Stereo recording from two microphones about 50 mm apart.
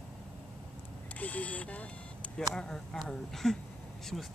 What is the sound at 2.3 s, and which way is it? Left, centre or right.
Speech, centre.